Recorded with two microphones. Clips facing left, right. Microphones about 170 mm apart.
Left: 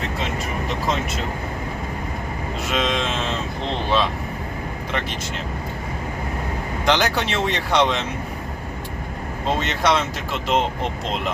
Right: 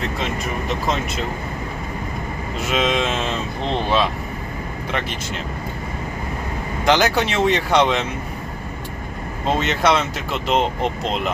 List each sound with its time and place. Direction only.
2.7 s speech: 5° right (ahead or behind)
6.8 s speech: 5° right (ahead or behind)
9.6 s speech: 5° right (ahead or behind)